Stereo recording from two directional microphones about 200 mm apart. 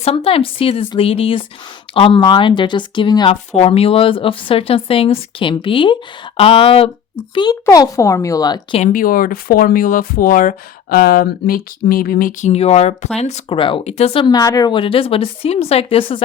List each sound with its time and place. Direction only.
0.0 s speech: 30° left (ahead or behind)
7.6 s speech: 15° left (ahead or behind)
8.8 s speech: 45° left (ahead or behind); by 16.2 s 25° left (ahead or behind)